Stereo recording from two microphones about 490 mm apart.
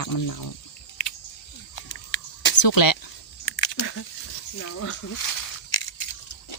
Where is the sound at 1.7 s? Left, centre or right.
Left.